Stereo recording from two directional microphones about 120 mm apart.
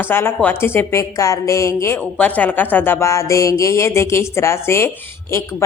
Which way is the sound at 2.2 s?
15° left (ahead or behind).